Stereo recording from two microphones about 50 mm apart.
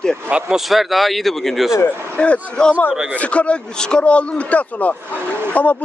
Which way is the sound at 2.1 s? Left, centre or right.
Left.